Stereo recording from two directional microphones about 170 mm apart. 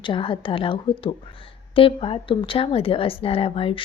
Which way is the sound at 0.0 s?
30° left (ahead or behind).